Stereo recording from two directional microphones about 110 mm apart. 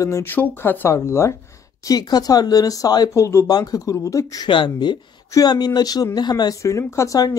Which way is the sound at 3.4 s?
35° left (ahead or behind).